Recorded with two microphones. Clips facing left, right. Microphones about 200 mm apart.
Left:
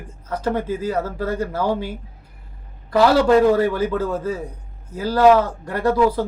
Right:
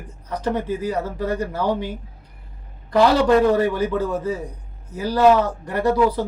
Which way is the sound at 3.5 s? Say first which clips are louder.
Left 1 dB; 15° right (ahead or behind).